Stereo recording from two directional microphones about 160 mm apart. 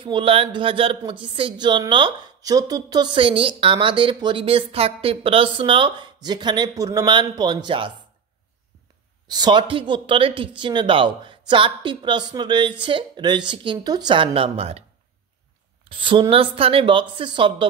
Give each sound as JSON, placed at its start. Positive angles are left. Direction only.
{"t": 0.0, "sound": "speech", "side_deg": -35}
{"t": 9.3, "sound": "speech", "side_deg": -25}
{"t": 15.9, "sound": "speech", "side_deg": -30}